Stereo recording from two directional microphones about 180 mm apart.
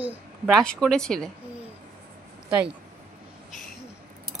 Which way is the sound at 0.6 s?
5° left (ahead or behind).